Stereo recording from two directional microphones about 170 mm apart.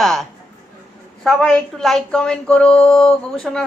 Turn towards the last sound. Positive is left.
turn(degrees=5)  # may be behind; listen again after turning